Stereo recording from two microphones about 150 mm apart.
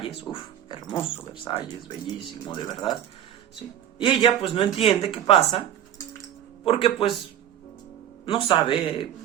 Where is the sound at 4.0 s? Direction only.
35° left (ahead or behind).